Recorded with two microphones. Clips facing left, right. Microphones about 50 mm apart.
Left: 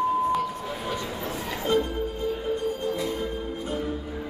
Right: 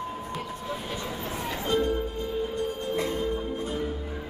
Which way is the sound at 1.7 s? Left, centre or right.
Centre.